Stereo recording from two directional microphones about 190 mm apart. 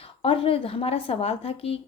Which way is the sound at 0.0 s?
30° left (ahead or behind).